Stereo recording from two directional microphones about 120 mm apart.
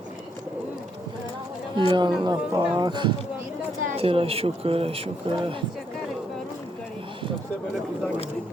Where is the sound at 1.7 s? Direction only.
40° right (ahead or behind).